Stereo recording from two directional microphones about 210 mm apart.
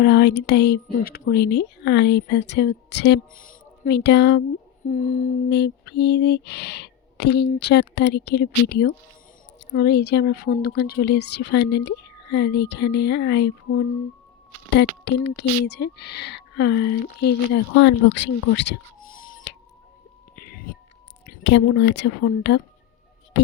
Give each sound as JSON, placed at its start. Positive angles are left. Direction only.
{"t": 0.0, "sound": "speech", "side_deg": 55}
{"t": 4.9, "sound": "humming", "side_deg": 40}
{"t": 5.5, "sound": "speech", "side_deg": 55}
{"t": 19.0, "sound": "music", "side_deg": 40}
{"t": 21.5, "sound": "speech", "side_deg": 55}